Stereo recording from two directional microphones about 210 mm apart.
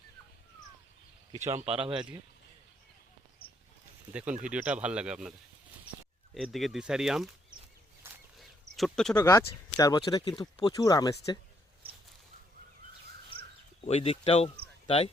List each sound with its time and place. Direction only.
1.6 s speech: 30° right (ahead or behind)
4.1 s speech: 5° right (ahead or behind)
6.3 s speech: centre (ahead or behind)
8.0 s a sound: 10° right (ahead or behind)
8.4 s a sound: centre (ahead or behind)
9.7 s speech: 15° left (ahead or behind)
13.8 s speech: 30° left (ahead or behind)